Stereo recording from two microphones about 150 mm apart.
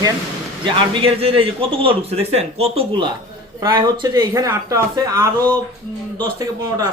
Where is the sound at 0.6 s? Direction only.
35° right (ahead or behind).